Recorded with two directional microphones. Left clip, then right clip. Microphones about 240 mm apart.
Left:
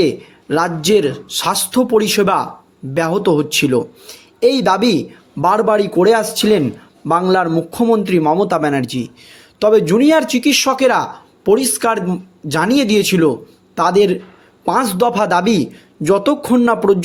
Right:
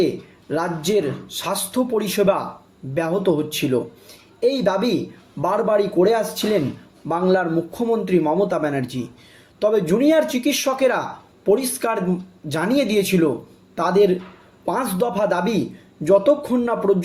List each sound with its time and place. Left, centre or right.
0.0 s speech: left